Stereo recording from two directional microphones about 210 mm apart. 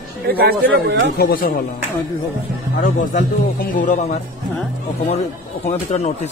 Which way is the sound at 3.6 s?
35° left (ahead or behind).